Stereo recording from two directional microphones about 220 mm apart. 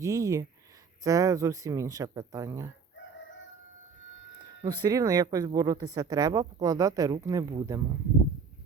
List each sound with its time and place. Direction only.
0.0 s speech: 15° right (ahead or behind)
4.6 s speech: 15° right (ahead or behind)